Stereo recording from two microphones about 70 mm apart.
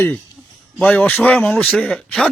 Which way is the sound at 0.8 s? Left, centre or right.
Left.